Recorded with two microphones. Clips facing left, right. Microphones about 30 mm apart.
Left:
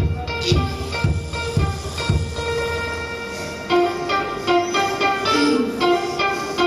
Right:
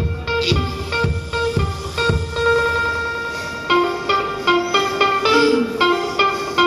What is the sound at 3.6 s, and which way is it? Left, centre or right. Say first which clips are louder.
Music: right 2 dB; right.